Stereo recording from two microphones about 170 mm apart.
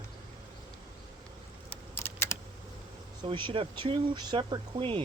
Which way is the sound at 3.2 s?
30° right (ahead or behind).